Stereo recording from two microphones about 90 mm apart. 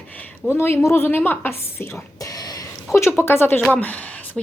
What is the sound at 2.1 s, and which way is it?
Whispering, 40° left (ahead or behind).